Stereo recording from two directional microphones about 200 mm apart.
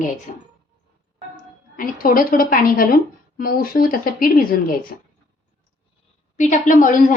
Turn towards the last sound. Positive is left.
turn(degrees=40)  # may be behind; listen again after turning